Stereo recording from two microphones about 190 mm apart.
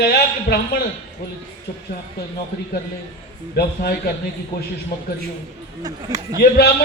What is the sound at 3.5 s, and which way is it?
Speech, 55° left (ahead or behind).